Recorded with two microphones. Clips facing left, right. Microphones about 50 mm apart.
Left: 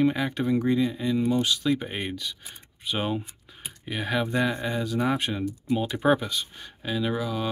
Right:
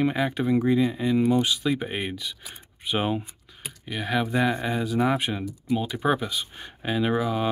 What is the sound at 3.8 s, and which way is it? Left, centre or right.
Speech, centre.